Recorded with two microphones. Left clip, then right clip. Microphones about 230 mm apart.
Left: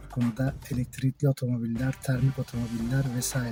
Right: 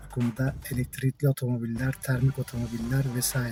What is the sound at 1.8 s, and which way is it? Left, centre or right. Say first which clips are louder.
Speech: even; centre.